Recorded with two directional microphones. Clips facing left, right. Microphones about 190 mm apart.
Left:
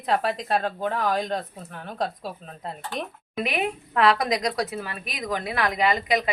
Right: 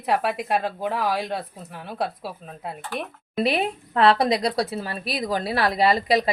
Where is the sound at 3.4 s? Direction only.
35° right (ahead or behind).